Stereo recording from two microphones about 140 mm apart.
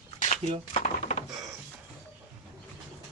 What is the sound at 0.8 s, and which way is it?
Dishes, 55° left (ahead or behind).